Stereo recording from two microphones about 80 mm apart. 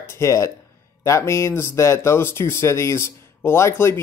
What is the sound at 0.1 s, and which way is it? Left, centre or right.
Speech, left.